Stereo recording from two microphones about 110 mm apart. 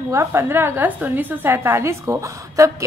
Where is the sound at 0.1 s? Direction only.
25° right (ahead or behind).